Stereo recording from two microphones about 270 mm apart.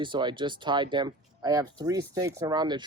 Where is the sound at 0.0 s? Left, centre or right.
Centre.